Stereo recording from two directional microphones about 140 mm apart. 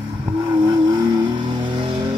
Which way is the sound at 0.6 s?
30° right (ahead or behind).